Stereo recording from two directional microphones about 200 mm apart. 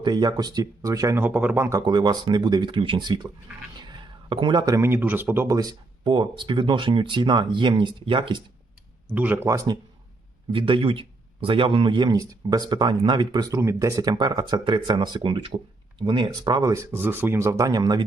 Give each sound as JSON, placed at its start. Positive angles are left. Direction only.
{"t": 0.0, "sound": "speech", "side_deg": -20}
{"t": 1.8, "sound": "speech", "side_deg": -20}
{"t": 9.0, "sound": "speech", "side_deg": -5}